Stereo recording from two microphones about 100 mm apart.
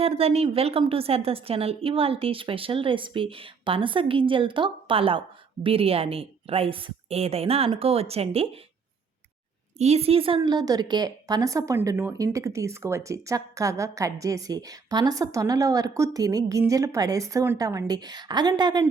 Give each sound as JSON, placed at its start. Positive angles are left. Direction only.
{"t": 0.0, "sound": "a woman's voice", "side_deg": -85}
{"t": 9.8, "sound": "a woman's voice", "side_deg": -85}
{"t": 10.4, "sound": "a woman's voice", "side_deg": -40}